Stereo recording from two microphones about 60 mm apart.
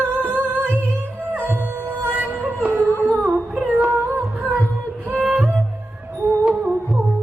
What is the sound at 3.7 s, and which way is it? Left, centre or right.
Music, right.